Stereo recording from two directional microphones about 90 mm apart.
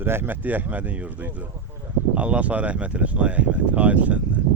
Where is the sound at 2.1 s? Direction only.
15° right (ahead or behind).